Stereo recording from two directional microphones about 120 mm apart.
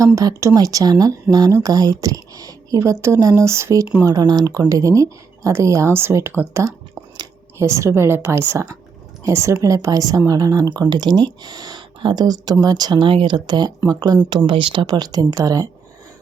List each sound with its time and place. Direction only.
0.0 s a woman's voice: 25° right (ahead or behind)